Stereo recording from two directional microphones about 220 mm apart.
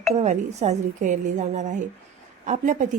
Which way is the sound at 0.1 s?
30° right (ahead or behind).